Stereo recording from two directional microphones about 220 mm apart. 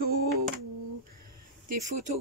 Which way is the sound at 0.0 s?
45° right (ahead or behind).